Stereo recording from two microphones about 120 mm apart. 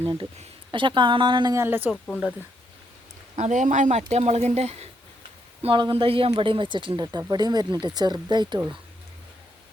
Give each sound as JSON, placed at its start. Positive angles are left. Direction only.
{"t": 0.7, "sound": "speech", "side_deg": -40}
{"t": 1.5, "sound": "speech", "side_deg": -20}
{"t": 3.3, "sound": "speech", "side_deg": -80}
{"t": 5.6, "sound": "speech", "side_deg": -45}